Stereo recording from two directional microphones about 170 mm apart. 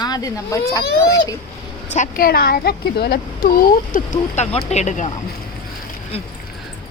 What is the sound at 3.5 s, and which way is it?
Speech, 55° left (ahead or behind).